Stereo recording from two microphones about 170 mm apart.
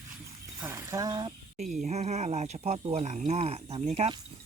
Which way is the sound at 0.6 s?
15° right (ahead or behind).